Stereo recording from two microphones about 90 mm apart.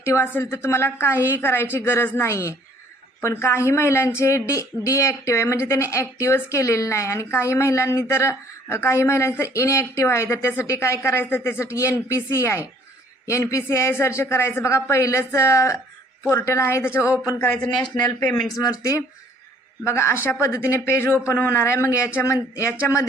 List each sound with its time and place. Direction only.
0.0 s a man's voice: 30° left (ahead or behind)
17.8 s speech: 50° left (ahead or behind)
18.6 s a man's voice: 40° left (ahead or behind)